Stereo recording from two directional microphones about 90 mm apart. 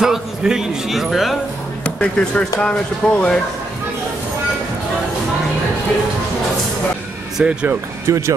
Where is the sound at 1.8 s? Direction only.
10° left (ahead or behind).